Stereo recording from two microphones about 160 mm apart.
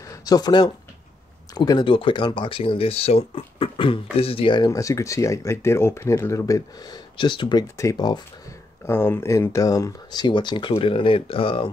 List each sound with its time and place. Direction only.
0.1 s speech: 25° left (ahead or behind)